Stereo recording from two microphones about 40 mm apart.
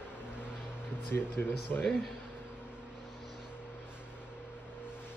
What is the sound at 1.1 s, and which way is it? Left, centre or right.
Speech, left.